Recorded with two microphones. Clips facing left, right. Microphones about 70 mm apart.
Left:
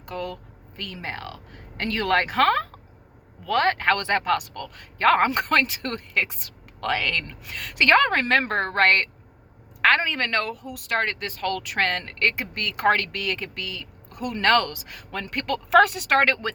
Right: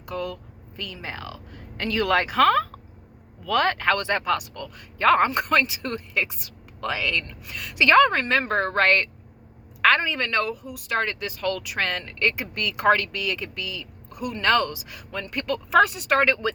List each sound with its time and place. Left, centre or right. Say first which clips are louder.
0.0 s speech: right 1 dB; left